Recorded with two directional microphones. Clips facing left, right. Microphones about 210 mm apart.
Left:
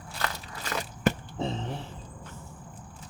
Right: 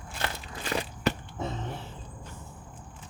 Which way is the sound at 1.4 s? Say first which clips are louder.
Left 3 dB; 30° left (ahead or behind).